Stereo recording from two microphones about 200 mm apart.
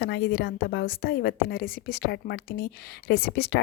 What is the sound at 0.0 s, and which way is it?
A woman's voice, 55° left (ahead or behind).